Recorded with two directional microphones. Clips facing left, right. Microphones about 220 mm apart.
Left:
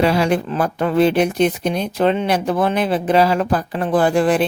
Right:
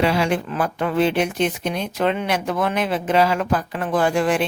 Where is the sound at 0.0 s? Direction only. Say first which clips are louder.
Left 3 dB; 40° left (ahead or behind).